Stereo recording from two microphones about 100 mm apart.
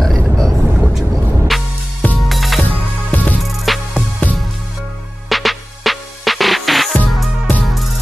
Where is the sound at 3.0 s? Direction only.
15° left (ahead or behind).